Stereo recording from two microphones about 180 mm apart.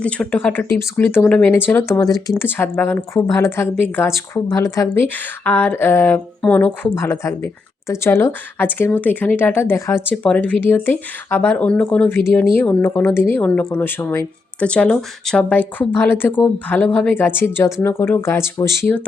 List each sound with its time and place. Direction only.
0.0 s speech: 10° left (ahead or behind)